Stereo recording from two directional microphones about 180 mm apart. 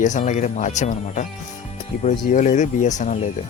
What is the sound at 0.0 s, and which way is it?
Speech, 45° left (ahead or behind).